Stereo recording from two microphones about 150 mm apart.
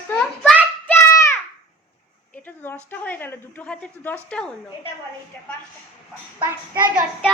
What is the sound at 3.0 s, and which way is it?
A child's voice, 10° left (ahead or behind).